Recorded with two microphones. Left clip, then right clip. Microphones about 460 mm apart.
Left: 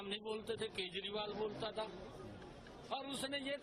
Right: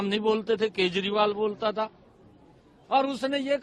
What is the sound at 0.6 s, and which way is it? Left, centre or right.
Speech, right.